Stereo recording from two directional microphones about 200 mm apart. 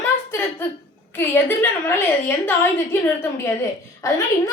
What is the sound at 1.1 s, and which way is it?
A woman's voice, 10° left (ahead or behind).